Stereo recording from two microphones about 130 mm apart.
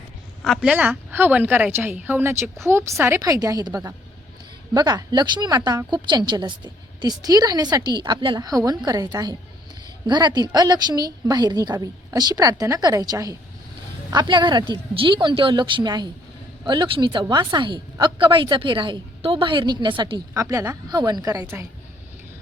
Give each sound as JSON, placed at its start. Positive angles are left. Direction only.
{"t": 0.4, "sound": "speech", "side_deg": 0}
{"t": 0.7, "sound": "a woman's voice", "side_deg": -10}
{"t": 20.3, "sound": "a woman's voice", "side_deg": -25}